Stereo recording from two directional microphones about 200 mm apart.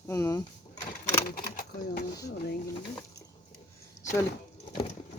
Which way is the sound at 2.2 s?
50° left (ahead or behind).